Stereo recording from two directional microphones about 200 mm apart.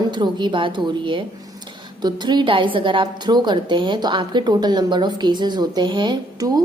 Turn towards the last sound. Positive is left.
turn(degrees=-25)  # may be behind; listen again after turning